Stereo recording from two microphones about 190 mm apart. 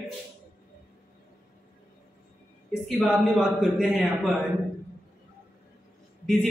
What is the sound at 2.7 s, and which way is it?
A man's voice, 5° right (ahead or behind).